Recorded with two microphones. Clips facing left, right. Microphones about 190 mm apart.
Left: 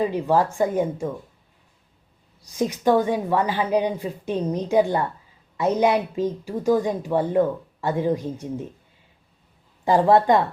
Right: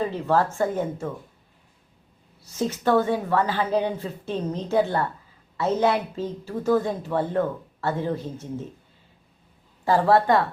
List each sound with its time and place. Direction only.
0.0 s a woman's voice: 15° left (ahead or behind)
2.4 s a woman's voice: 15° left (ahead or behind)
9.8 s a woman's voice: 15° left (ahead or behind)